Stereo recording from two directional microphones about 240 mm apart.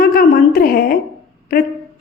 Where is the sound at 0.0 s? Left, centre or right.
Left.